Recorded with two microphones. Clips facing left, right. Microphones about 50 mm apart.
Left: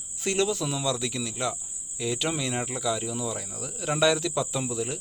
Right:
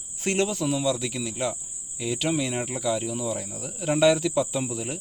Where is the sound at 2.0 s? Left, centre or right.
Centre.